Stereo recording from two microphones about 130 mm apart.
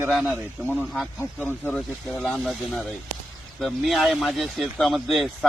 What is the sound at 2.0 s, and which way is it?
Speech, 5° left (ahead or behind).